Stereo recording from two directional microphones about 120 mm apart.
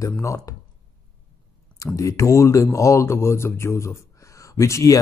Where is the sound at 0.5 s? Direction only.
25° left (ahead or behind).